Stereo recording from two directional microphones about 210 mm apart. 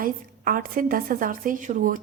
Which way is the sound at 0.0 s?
45° right (ahead or behind).